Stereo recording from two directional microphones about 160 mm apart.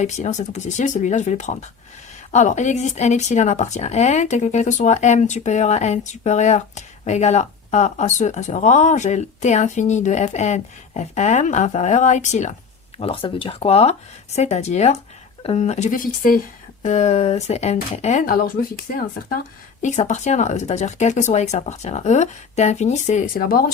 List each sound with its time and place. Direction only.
0.0 s speech: 45° left (ahead or behind)
13.0 s speech: 35° left (ahead or behind)
19.8 s speech: 50° left (ahead or behind)